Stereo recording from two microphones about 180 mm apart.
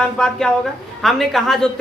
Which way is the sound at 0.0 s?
5° left (ahead or behind).